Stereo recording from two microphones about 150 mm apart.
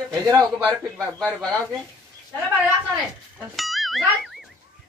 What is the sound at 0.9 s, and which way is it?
Speech, 5° left (ahead or behind).